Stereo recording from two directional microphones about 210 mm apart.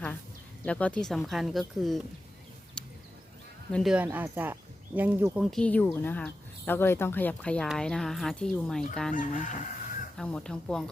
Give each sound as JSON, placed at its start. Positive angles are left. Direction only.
{"t": 0.6, "sound": "speech", "side_deg": 5}
{"t": 2.8, "sound": "a sound", "side_deg": 5}
{"t": 3.7, "sound": "speech", "side_deg": 0}
{"t": 9.1, "sound": "chicken", "side_deg": 35}
{"t": 10.2, "sound": "speech", "side_deg": 5}